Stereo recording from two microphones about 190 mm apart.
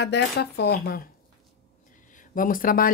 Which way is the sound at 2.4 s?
45° left (ahead or behind).